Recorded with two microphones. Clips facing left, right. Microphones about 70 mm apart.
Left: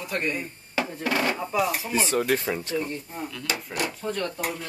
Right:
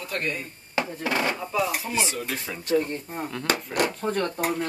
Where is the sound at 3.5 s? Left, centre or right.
Right.